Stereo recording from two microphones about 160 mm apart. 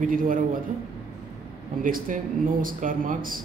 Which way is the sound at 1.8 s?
60° right (ahead or behind).